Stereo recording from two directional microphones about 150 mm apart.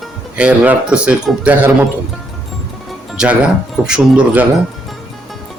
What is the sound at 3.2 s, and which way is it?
Speech, 5° right (ahead or behind).